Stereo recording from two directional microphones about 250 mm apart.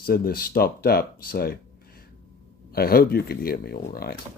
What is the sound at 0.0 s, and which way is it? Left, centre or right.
Speech, left.